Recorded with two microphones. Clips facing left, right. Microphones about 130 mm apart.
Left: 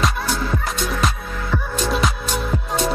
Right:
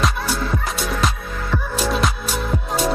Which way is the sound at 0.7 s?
Centre (ahead or behind).